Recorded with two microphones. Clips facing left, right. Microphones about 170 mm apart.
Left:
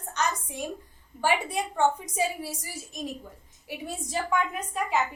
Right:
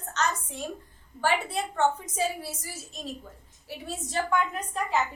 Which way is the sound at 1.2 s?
15° left (ahead or behind).